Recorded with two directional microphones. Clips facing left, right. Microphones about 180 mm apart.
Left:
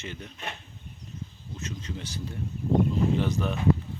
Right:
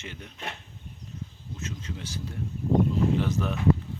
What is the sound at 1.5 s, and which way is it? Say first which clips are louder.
Speech: left 1 dB; 5° right (ahead or behind).